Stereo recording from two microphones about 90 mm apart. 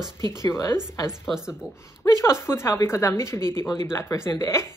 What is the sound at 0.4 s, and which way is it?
Speech, 35° left (ahead or behind).